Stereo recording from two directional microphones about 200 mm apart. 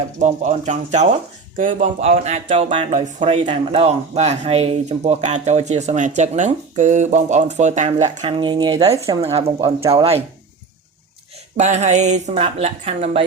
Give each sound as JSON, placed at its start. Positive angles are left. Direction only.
{"t": 0.2, "sound": "speech", "side_deg": -35}
{"t": 9.2, "sound": "speech", "side_deg": -30}
{"t": 11.5, "sound": "speech", "side_deg": -35}